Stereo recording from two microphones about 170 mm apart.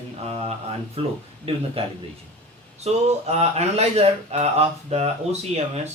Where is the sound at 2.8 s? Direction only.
40° right (ahead or behind).